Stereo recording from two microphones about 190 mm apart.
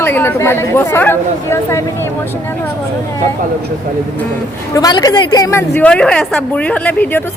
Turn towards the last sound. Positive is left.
turn(degrees=10)  # may be behind; listen again after turning